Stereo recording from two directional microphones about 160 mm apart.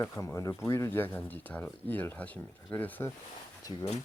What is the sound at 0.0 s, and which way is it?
Speech, 15° left (ahead or behind).